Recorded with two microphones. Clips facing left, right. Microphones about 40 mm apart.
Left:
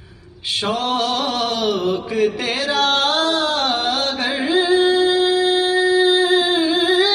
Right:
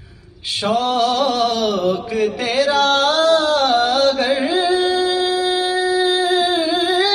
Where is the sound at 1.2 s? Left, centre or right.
Centre.